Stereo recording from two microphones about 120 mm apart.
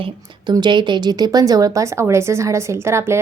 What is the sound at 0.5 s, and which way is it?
A woman's voice, 40° right (ahead or behind).